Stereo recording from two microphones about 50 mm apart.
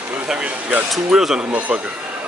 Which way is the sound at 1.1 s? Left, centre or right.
Centre.